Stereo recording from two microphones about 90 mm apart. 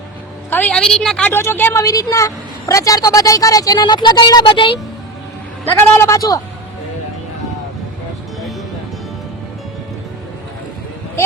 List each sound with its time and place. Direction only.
0.7 s a woman's voice: 10° left (ahead or behind)
1.3 s a woman's voice: 25° left (ahead or behind)
1.8 s a woman's voice: 40° left (ahead or behind); by 4.7 s 65° left (ahead or behind)
5.7 s a man's voice: 35° left (ahead or behind)